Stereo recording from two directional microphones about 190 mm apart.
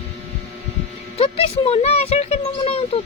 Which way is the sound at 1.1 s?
30° left (ahead or behind).